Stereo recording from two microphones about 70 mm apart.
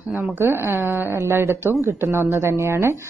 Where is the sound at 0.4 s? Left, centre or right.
Right.